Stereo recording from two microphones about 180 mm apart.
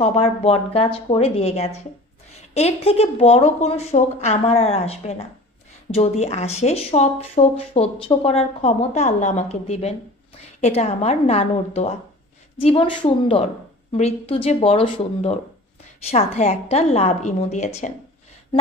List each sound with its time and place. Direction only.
0.0 s speech: 35° left (ahead or behind)